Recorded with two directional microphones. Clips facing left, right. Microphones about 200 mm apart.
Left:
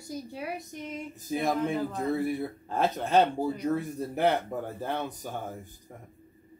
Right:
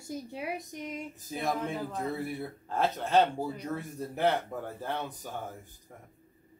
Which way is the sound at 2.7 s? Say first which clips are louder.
Left 2 dB; 15° left (ahead or behind).